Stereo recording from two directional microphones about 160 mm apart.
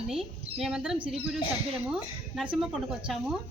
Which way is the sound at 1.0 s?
35° right (ahead or behind).